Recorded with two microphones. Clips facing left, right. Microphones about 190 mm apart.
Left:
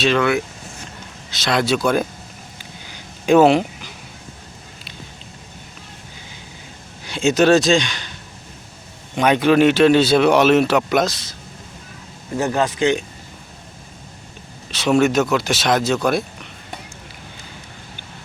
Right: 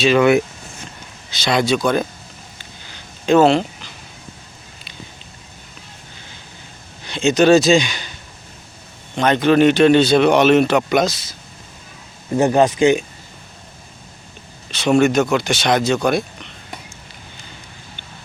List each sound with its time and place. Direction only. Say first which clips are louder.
0.2 s speech: right 5 dB; 20° right (ahead or behind)
1.3 s speech: right 2 dB; centre (ahead or behind)
2.8 s a sound: even; 10° left (ahead or behind)
7.0 s speech: right 1 dB; 10° left (ahead or behind)
9.1 s speech: even; 10° left (ahead or behind)
12.4 s speech: right 5 dB; 20° right (ahead or behind)
14.7 s speech: right 1 dB; 5° left (ahead or behind)